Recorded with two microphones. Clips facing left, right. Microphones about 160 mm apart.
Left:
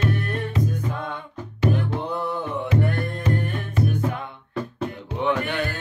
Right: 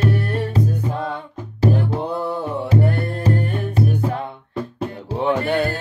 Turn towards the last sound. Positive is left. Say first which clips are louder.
# right 5 dB
turn(degrees=-35)  # may be behind; listen again after turning